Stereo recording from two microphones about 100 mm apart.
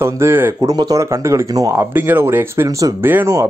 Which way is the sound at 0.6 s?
40° right (ahead or behind).